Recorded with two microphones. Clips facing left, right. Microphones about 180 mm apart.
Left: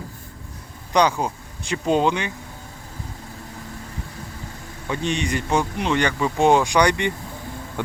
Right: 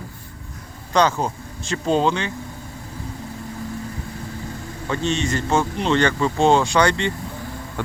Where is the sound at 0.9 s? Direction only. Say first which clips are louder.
Even; 10° left (ahead or behind).